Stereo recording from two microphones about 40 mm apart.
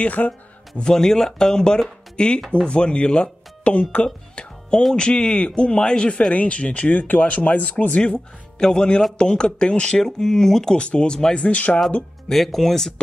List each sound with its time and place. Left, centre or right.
0.0 s speech: left
0.9 s speech: centre; by 3.8 s left
3.9 s music: left
4.9 s speech: left
6.3 s speech: left
8.0 s speech: centre
10.8 s speech: left
11.4 s speech: left
12.3 s speech: centre